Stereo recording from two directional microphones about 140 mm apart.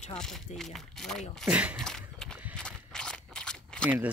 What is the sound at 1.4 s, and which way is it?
Speech, 10° right (ahead or behind).